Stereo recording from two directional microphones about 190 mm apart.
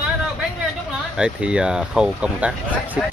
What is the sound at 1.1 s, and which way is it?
Speech, 5° right (ahead or behind).